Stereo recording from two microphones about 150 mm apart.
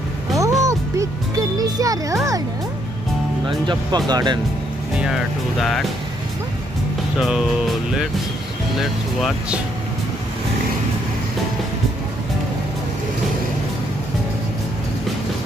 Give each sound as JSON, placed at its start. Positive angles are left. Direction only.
{"t": 0.4, "sound": "music", "side_deg": -20}
{"t": 3.4, "sound": "speech", "side_deg": -30}
{"t": 4.9, "sound": "speech", "side_deg": -5}
{"t": 7.2, "sound": "speech", "side_deg": 0}
{"t": 8.7, "sound": "speech", "side_deg": 0}